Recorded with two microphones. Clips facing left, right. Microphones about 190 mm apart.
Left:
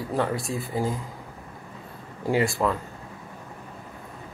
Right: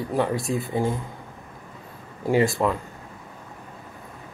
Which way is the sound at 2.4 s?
Centre (ahead or behind).